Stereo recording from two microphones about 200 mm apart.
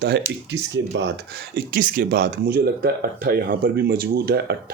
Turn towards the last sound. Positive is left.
turn(degrees=-50)  # may be behind; listen again after turning